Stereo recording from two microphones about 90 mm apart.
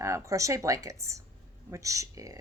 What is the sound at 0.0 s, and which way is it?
A woman's voice, 35° right (ahead or behind).